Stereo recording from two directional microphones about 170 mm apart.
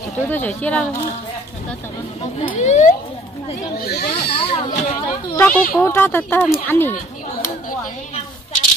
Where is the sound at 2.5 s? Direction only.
45° left (ahead or behind).